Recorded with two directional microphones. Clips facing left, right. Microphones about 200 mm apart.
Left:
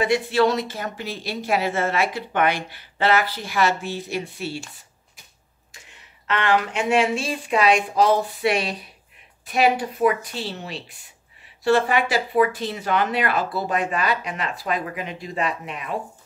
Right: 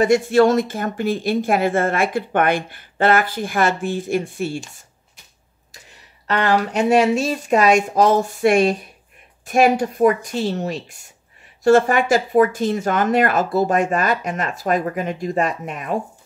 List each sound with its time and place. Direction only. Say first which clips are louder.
0.0 s speech: right 5 dB; 45° right (ahead or behind)
6.2 s speech: right 3 dB; 40° right (ahead or behind)